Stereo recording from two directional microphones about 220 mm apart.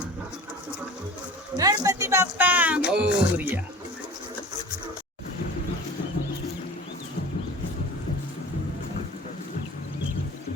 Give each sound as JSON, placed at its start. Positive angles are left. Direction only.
{"t": 1.5, "sound": "speech", "side_deg": -15}